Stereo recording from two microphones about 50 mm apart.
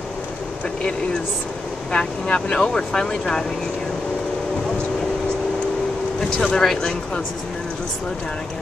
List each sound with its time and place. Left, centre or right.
1.9 s speech: centre
6.3 s speech: centre